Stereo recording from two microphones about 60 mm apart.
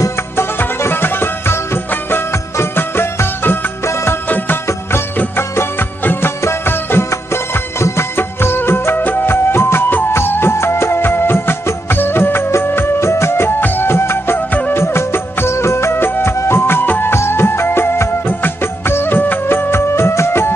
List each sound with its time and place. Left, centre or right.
0.4 s music: left
2.5 s music of bollywood: left
5.6 s music: left
8.2 s music: left